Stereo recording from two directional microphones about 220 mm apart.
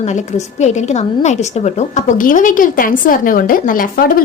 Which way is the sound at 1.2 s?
30° left (ahead or behind).